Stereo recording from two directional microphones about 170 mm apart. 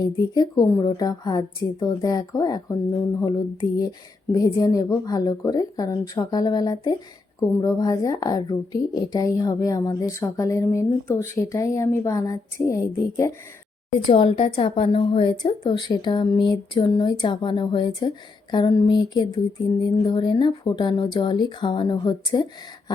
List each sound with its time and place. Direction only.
0.0 s a woman's voice: 25° left (ahead or behind)
14.1 s a woman's voice: 30° left (ahead or behind)